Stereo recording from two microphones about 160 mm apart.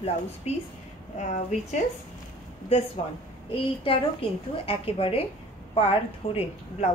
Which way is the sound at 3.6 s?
35° left (ahead or behind).